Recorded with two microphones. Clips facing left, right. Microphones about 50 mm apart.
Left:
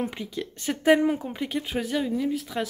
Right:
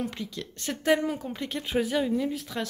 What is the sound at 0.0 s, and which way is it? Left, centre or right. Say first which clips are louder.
Speech: left 3 dB; centre.